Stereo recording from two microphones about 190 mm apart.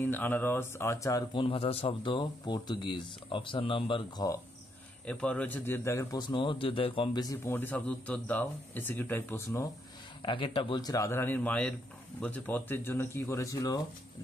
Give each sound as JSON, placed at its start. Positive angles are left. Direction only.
{"t": 0.0, "sound": "speech", "side_deg": 10}
{"t": 5.0, "sound": "a man's voice", "side_deg": 5}
{"t": 10.2, "sound": "a man's voice", "side_deg": 25}